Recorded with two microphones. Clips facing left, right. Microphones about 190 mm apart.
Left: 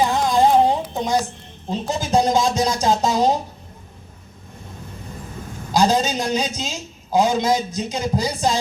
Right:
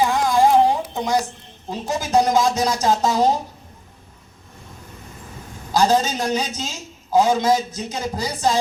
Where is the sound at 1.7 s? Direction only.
25° left (ahead or behind).